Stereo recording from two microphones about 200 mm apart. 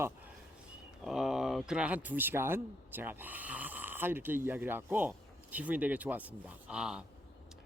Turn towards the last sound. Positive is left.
turn(degrees=-5)  # may be behind; listen again after turning